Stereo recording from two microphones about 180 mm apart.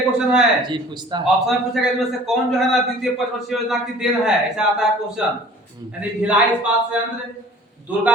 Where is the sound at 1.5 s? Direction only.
Centre (ahead or behind).